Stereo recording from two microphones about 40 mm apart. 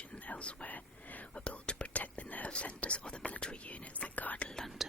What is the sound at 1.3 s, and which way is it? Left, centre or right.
Whispering, left.